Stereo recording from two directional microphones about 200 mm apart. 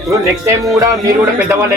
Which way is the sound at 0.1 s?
15° right (ahead or behind).